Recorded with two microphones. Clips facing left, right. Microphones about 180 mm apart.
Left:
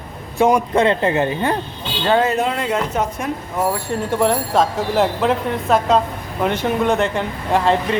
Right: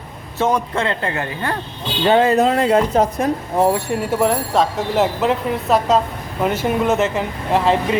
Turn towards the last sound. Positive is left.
turn(degrees=0)  # may be behind; listen again after turning